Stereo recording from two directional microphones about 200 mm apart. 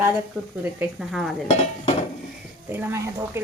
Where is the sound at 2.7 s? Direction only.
10° right (ahead or behind).